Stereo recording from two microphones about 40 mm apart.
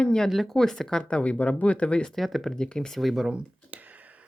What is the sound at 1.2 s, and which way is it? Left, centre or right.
Speech, left.